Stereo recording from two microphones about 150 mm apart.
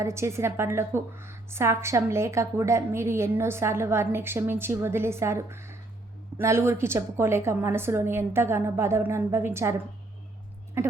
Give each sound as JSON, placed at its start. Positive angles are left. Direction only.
{"t": 0.0, "sound": "a woman's voice", "side_deg": -20}